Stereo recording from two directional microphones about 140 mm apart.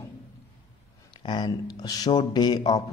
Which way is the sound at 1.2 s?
30° left (ahead or behind).